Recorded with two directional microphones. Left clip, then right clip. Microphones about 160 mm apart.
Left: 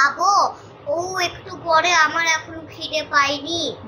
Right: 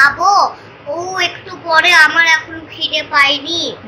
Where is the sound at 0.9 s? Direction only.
15° right (ahead or behind).